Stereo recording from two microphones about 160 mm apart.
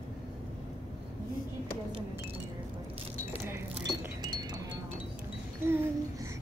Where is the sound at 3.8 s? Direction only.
25° right (ahead or behind).